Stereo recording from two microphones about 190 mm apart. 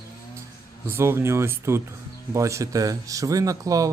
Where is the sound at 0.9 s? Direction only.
15° right (ahead or behind).